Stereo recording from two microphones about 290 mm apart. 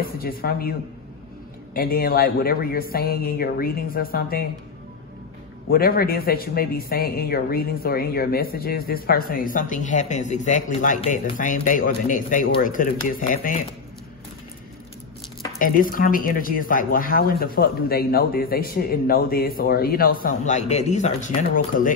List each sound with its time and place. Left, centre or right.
0.0 s speech: left
5.7 s speech: left
15.6 s speech: left